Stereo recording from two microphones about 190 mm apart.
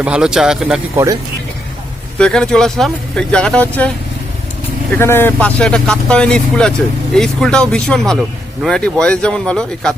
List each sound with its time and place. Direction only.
0.0 s speech: 5° right (ahead or behind)
0.9 s speech: 15° right (ahead or behind)
2.1 s speech: 5° left (ahead or behind)
4.9 s speech: 10° left (ahead or behind)